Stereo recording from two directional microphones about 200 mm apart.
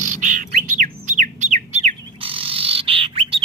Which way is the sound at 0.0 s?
40° right (ahead or behind).